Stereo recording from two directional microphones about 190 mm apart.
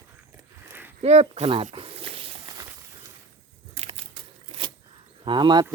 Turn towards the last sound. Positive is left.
turn(degrees=-25)  # may be behind; listen again after turning